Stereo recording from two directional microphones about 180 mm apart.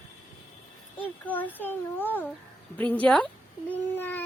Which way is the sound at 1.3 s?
10° left (ahead or behind).